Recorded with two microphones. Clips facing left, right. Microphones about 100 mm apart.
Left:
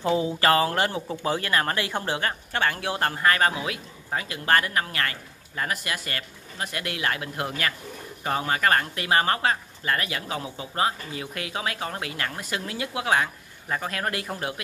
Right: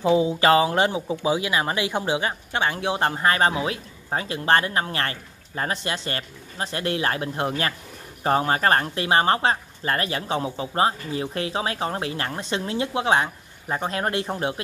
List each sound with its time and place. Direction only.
0.0 s speech: 20° right (ahead or behind)